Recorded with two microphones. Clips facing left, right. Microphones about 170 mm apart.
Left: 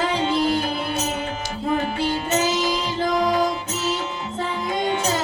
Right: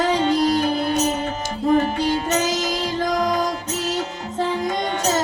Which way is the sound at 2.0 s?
40° right (ahead or behind).